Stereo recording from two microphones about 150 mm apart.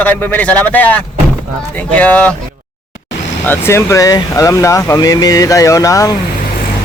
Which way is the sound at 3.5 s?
15° left (ahead or behind).